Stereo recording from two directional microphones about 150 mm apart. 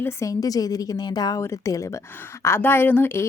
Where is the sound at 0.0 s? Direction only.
20° left (ahead or behind).